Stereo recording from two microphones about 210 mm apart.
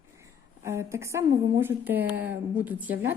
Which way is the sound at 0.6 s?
15° right (ahead or behind).